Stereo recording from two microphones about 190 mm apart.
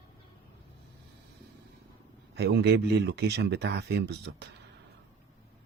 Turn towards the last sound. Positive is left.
turn(degrees=-65)  # may be behind; listen again after turning